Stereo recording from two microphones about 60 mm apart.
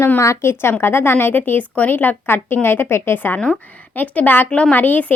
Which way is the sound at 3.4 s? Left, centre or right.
Left.